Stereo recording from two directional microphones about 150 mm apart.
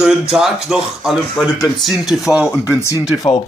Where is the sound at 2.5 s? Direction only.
20° left (ahead or behind).